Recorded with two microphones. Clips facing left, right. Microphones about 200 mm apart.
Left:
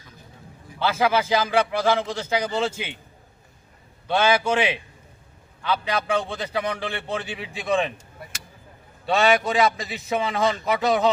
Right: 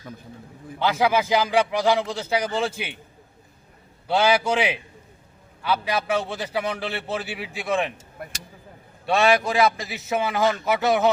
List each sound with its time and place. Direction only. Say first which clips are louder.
0.8 s a man's voice: right 1 dB; 15° right (ahead or behind)
4.1 s a man's voice: even; 10° right (ahead or behind)
9.0 s a man's voice: even; centre (ahead or behind)